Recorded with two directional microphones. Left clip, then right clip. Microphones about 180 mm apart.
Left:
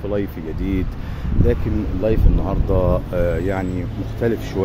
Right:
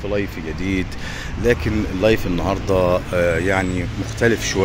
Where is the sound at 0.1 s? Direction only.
15° left (ahead or behind).